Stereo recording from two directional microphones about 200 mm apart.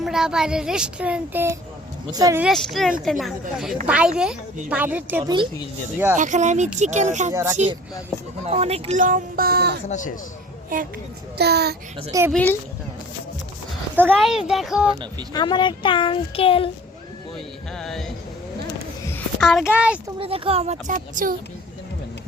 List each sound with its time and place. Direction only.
0.0 s a child's voice: 5° right (ahead or behind); by 2.4 s 20° right (ahead or behind)
2.4 s a child's voice: centre (ahead or behind)
5.2 s speech: 20° right (ahead or behind)
6.1 s speech: 40° right (ahead or behind)
11.3 s a child's voice: 55° right (ahead or behind)
12.3 s speech: 10° left (ahead or behind)
13.9 s a child's voice: 5° right (ahead or behind)
15.3 s speech: 20° left (ahead or behind)
17.7 s speech: centre (ahead or behind)
19.1 s a child's voice: centre (ahead or behind)
20.1 s speech: 25° right (ahead or behind)